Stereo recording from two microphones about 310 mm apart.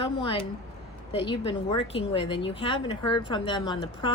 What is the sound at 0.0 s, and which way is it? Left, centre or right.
A woman's voice, centre.